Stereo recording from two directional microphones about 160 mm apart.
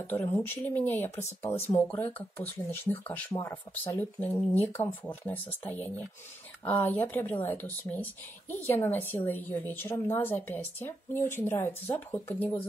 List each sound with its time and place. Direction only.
0.1 s speech: 10° left (ahead or behind)